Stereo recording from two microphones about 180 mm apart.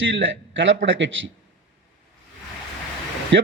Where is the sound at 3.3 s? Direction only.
85° right.